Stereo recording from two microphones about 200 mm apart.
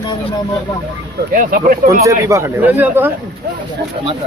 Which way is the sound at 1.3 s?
45° right (ahead or behind).